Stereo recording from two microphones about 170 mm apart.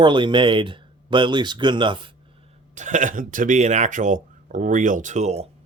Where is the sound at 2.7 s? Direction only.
45° right (ahead or behind).